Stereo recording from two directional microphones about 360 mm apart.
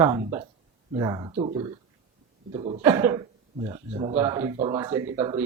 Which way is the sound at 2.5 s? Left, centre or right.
Centre.